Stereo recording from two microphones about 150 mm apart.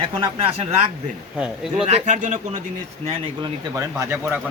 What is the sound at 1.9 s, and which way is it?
Speech, 50° right (ahead or behind).